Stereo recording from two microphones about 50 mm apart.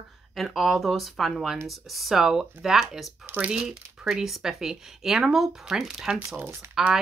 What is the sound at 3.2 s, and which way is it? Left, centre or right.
Speech, right.